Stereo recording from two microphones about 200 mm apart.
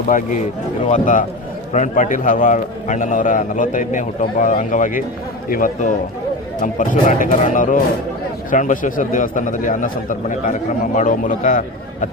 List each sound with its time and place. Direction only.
0.1 s a man's voice: 40° left (ahead or behind)